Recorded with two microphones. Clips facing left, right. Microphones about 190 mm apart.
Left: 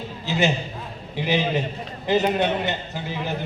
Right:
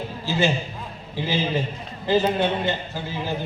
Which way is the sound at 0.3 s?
20° left (ahead or behind).